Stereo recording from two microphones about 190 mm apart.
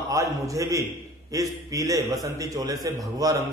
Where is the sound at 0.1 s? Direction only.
15° right (ahead or behind).